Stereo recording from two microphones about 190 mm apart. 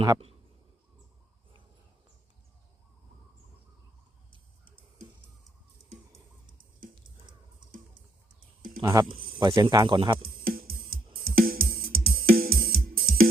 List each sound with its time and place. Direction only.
0.0 s speech: 25° right (ahead or behind)
8.8 s speech: 20° right (ahead or behind)
10.4 s music: 50° right (ahead or behind)